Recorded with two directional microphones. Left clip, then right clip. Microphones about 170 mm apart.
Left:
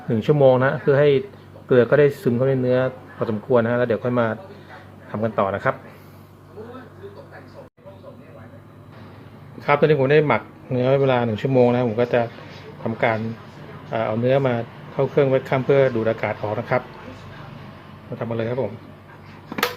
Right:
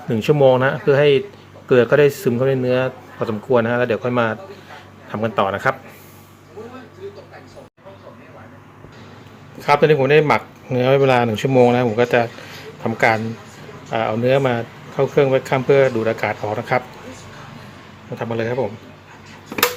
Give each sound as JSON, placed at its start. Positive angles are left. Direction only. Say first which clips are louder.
{"t": 0.1, "sound": "speech", "louder": "right 2 dB", "side_deg": -15}
{"t": 9.6, "sound": "speech", "louder": "right 3 dB", "side_deg": -15}
{"t": 18.2, "sound": "speech", "louder": "right 3 dB", "side_deg": -20}